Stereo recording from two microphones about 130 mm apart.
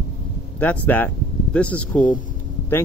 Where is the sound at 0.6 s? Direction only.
10° left (ahead or behind).